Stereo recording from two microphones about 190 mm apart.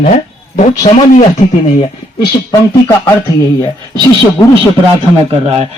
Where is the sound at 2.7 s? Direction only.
25° left (ahead or behind).